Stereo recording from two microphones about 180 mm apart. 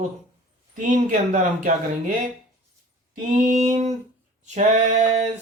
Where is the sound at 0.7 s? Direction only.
45° right (ahead or behind).